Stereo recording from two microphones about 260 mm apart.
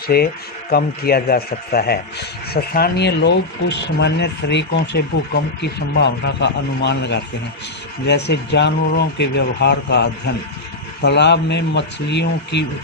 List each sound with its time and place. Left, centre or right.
0.1 s speech: left